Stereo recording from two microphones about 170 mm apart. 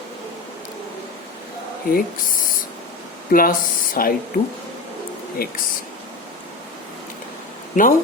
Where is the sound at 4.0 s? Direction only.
55° left (ahead or behind).